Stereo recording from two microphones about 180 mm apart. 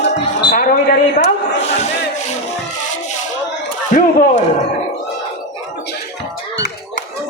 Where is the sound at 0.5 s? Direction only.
55° left (ahead or behind).